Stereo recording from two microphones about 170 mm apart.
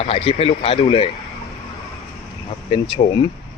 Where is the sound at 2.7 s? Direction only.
30° left (ahead or behind).